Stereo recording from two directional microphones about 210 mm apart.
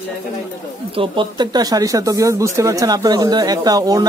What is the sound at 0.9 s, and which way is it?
Speech, 25° right (ahead or behind).